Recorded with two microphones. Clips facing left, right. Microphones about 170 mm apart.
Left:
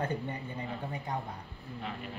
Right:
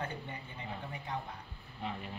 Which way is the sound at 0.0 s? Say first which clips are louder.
Left 7 dB; 40° left (ahead or behind).